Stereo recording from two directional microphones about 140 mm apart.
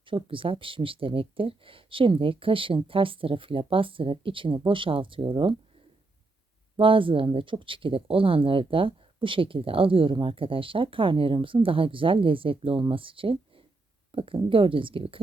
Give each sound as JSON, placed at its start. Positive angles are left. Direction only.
{"t": 0.0, "sound": "speech", "side_deg": -40}
{"t": 6.7, "sound": "speech", "side_deg": -40}